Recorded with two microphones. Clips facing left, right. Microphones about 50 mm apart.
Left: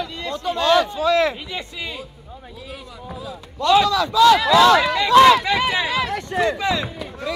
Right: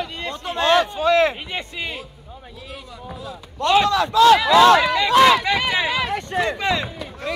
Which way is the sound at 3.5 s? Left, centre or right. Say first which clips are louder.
Left 1 dB; right.